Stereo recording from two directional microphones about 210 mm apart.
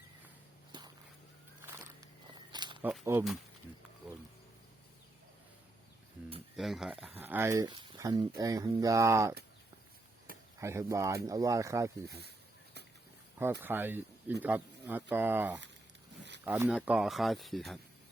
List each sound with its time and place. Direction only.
0.7 s a sound: 20° right (ahead or behind)
2.5 s a sound: 20° right (ahead or behind)
2.8 s speech: 10° right (ahead or behind)
6.6 s speech: centre (ahead or behind)
10.6 s speech: 15° right (ahead or behind)
13.4 s speech: 10° right (ahead or behind)